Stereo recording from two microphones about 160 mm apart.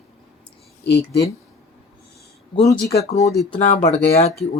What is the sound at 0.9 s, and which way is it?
Speech, 90° left.